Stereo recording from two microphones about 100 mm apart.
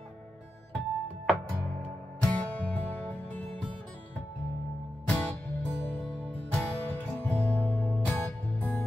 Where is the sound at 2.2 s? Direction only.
15° left (ahead or behind).